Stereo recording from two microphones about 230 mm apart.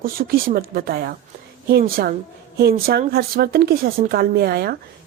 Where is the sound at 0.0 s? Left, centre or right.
Right.